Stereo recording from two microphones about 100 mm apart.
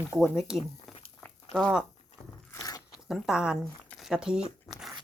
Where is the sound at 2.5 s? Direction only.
35° left (ahead or behind).